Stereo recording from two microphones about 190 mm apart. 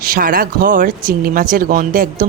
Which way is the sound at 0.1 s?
50° right (ahead or behind).